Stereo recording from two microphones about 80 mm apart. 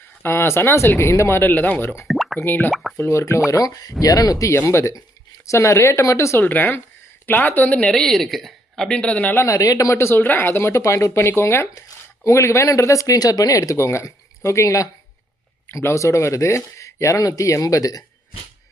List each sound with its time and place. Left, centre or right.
0.2 s speech: left
1.4 s speech: left
2.0 s plop: centre
2.4 s speech: left
6.4 s speech: left
9.4 s speech: left